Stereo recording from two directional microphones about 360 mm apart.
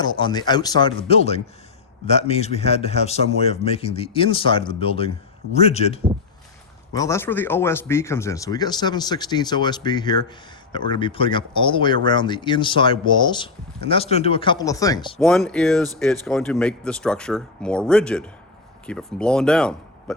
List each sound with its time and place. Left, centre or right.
0.0 s speech: centre